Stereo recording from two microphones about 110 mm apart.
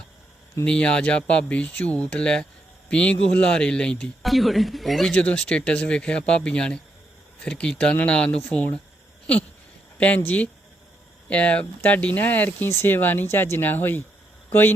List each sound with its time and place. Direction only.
0.6 s speech: 10° left (ahead or behind)
10.2 s speech: 15° left (ahead or behind)